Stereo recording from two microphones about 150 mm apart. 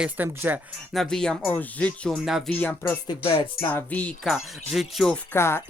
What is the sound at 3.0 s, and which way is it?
Speech, 40° left (ahead or behind).